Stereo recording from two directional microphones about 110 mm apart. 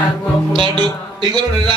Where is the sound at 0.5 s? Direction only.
45° right (ahead or behind).